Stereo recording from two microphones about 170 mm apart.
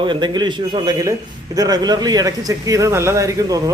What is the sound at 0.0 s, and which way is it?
Speech, 25° right (ahead or behind).